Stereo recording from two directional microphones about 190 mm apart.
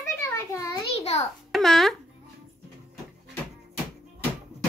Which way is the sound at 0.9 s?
35° left (ahead or behind).